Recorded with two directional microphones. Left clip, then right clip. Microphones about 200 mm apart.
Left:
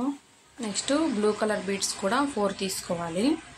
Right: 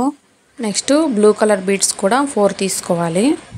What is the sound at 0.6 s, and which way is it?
Speech, 40° right (ahead or behind).